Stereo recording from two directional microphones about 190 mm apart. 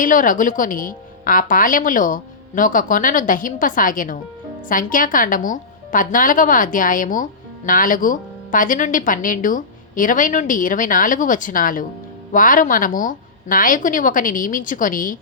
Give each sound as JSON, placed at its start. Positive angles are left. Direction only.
{"t": 0.0, "sound": "a woman's voice", "side_deg": 45}